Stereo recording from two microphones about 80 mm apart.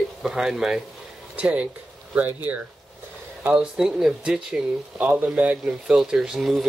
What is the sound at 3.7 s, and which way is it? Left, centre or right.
Speech, centre.